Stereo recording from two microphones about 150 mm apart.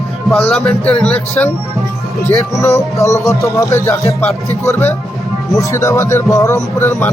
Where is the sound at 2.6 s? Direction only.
20° left (ahead or behind).